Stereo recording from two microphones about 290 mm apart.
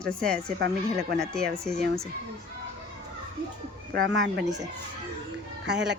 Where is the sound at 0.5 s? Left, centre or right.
Right.